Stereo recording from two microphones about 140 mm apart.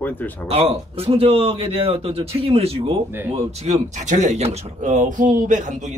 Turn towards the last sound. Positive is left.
turn(degrees=-60)  # may be behind; listen again after turning